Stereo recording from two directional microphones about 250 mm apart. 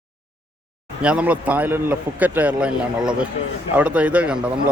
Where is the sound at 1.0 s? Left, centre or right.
Centre.